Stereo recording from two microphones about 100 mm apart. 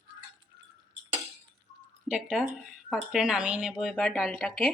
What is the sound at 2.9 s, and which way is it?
Speech, 5° right (ahead or behind).